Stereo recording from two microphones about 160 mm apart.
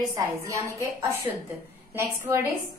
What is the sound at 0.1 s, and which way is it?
A woman's voice, 20° right (ahead or behind).